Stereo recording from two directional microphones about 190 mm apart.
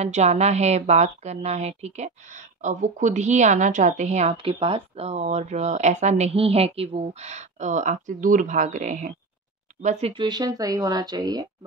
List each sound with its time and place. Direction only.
0.0 s a woman's voice: 35° right (ahead or behind); by 11.4 s 20° right (ahead or behind)